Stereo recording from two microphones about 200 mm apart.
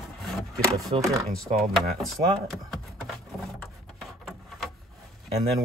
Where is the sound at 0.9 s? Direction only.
25° right (ahead or behind).